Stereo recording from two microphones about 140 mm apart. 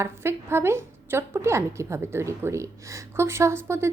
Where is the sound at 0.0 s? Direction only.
20° right (ahead or behind).